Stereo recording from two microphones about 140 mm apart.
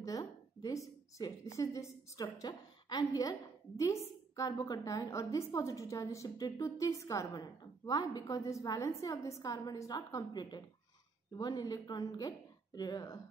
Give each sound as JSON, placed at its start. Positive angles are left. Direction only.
{"t": 0.0, "sound": "a woman's voice", "side_deg": 25}